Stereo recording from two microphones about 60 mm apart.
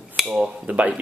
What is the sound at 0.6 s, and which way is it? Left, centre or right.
Speech, right.